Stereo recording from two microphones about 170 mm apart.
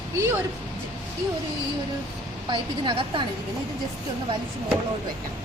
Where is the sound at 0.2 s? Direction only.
15° right (ahead or behind).